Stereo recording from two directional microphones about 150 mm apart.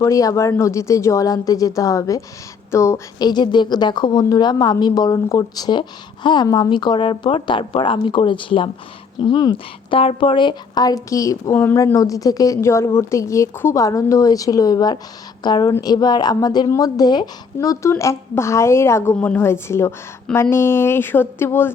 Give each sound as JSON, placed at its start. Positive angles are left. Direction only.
{"t": 0.0, "sound": "speech", "side_deg": 20}